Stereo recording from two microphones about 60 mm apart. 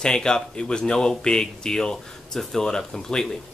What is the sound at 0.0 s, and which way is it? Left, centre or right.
Speech, centre.